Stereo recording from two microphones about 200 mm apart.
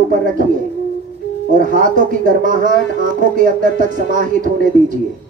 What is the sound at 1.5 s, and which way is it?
Speech, 40° right (ahead or behind).